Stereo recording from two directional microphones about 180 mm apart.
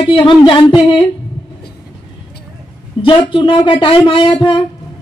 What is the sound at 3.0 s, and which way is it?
Speech, 30° left (ahead or behind).